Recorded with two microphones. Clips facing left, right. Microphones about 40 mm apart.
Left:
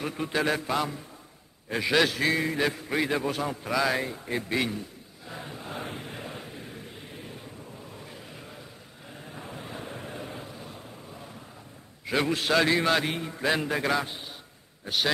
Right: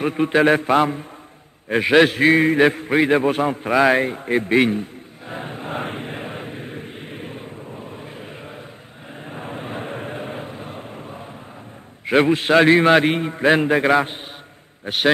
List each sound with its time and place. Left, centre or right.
0.0 s a man's voice: right
5.3 s vehicle: right
12.1 s a man's voice: right